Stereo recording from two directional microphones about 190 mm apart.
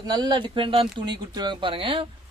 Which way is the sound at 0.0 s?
20° right (ahead or behind).